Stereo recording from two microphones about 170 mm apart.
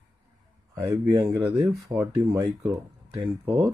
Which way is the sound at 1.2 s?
15° right (ahead or behind).